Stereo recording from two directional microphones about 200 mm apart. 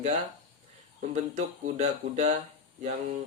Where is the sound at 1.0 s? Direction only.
35° right (ahead or behind).